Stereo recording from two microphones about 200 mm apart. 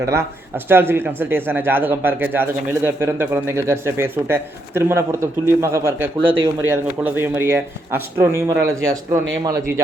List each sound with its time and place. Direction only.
0.0 s speech: 15° right (ahead or behind)